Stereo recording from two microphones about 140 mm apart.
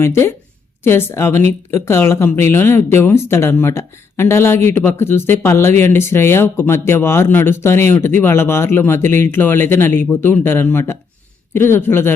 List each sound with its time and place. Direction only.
0.0 s speech: 20° left (ahead or behind)